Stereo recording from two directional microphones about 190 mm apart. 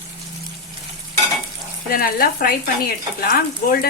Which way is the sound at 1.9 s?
50° left (ahead or behind).